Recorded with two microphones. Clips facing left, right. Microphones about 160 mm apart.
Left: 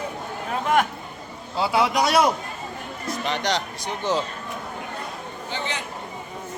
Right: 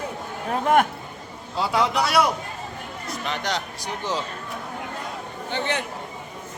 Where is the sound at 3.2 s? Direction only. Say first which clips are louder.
Left 2 dB; 5° right (ahead or behind).